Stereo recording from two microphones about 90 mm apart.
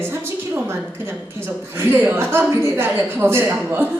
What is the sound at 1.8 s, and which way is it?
A woman's voice, 25° right (ahead or behind).